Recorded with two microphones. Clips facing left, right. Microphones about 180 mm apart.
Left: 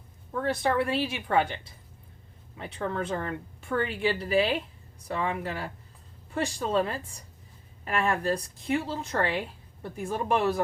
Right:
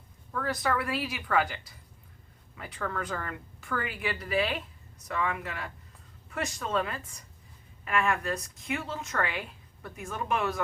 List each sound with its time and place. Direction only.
0.3 s a woman's voice: 25° left (ahead or behind)